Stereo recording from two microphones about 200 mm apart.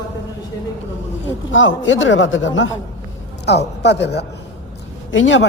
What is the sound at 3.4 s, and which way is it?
A woman's voice, 55° left (ahead or behind).